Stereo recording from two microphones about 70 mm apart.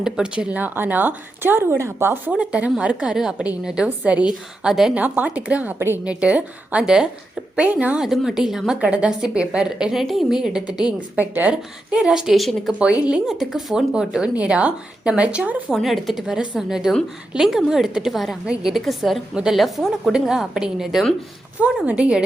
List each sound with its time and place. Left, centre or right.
0.0 s speech: centre; by 2.3 s right
2.3 s a woman's voice: centre
3.8 s speech: right
4.3 s a woman's voice: centre
4.9 s a woman's voice: right
8.0 s a woman's voice: centre
11.2 s speech: right
11.5 s a woman's voice: centre
12.8 s a woman's voice: centre
15.7 s a woman's voice: centre
18.4 s a woman's voice: centre
18.7 s a woman's voice: centre
21.8 s a woman's voice: centre